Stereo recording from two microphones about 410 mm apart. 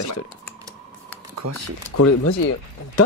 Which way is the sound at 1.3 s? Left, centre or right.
Right.